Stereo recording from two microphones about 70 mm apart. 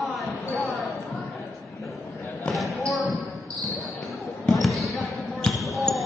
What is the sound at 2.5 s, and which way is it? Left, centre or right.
Basketball bounce, centre.